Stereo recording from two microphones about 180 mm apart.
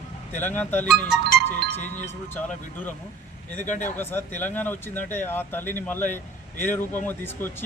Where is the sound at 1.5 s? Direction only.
10° left (ahead or behind).